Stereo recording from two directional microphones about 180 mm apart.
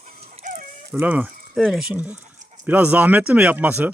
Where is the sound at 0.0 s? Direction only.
55° right (ahead or behind).